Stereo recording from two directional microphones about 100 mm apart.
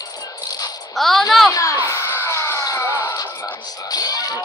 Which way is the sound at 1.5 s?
35° left (ahead or behind).